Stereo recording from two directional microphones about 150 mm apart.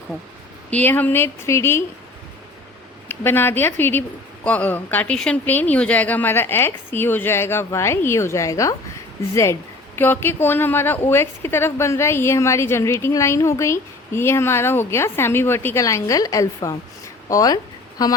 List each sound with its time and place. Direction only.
0.7 s speech: 10° left (ahead or behind)
3.1 s speech: 15° left (ahead or behind)